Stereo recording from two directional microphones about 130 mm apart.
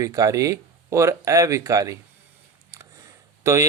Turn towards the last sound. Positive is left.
turn(degrees=-20)  # may be behind; listen again after turning